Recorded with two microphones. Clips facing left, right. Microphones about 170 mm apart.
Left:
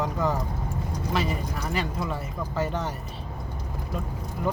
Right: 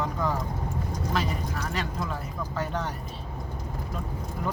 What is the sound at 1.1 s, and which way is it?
Speech, 5° left (ahead or behind).